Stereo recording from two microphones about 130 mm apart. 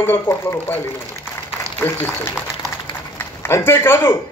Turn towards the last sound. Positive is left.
turn(degrees=20)  # may be behind; listen again after turning